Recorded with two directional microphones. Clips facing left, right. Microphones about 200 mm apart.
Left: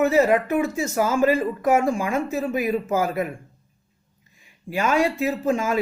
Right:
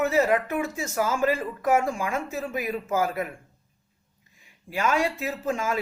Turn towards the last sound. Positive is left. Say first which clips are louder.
# left 5 dB
turn(degrees=15)  # may be behind; listen again after turning